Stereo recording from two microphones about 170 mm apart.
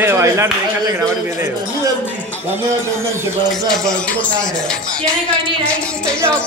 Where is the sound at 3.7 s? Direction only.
5° left (ahead or behind).